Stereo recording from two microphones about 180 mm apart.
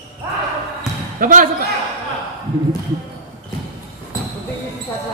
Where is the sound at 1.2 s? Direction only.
50° right (ahead or behind).